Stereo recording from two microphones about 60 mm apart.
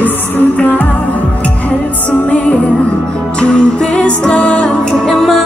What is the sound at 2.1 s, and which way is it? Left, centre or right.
Music, left.